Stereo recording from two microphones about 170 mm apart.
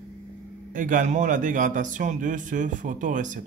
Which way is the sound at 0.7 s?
50° right (ahead or behind).